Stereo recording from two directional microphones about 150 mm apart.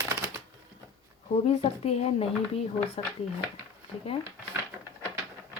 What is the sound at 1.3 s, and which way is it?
Speech, 45° left (ahead or behind).